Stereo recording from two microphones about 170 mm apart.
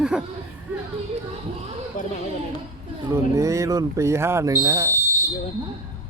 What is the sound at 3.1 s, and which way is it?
Speech, 20° right (ahead or behind).